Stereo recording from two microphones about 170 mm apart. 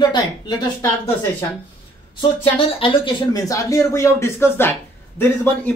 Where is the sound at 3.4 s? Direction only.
20° left (ahead or behind).